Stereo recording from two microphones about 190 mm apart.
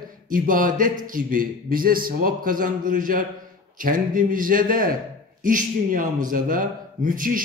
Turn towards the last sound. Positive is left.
turn(degrees=-45)  # may be behind; listen again after turning